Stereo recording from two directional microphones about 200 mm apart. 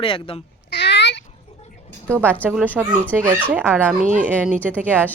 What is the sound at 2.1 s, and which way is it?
Speech, 10° right (ahead or behind).